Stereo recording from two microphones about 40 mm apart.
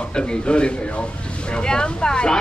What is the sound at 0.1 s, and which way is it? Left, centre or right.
Speech, left.